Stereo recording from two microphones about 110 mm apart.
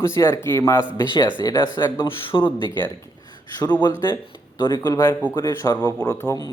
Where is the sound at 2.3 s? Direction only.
50° left (ahead or behind).